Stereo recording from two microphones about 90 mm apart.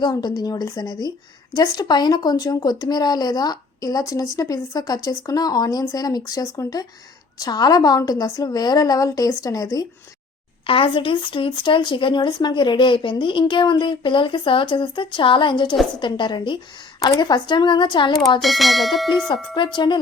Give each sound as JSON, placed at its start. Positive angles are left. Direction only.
{"t": 0.0, "sound": "speech", "side_deg": 50}
{"t": 10.7, "sound": "speech", "side_deg": 85}
{"t": 17.0, "sound": "speech", "side_deg": 50}
{"t": 18.3, "sound": "speech", "side_deg": 0}
{"t": 19.3, "sound": "speech", "side_deg": 60}